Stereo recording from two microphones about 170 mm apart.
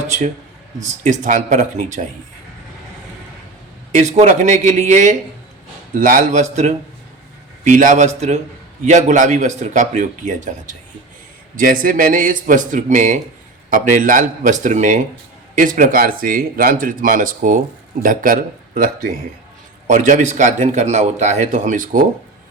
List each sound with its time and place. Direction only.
1.0 s a man's voice: 45° right (ahead or behind)
3.9 s a man's voice: 45° right (ahead or behind)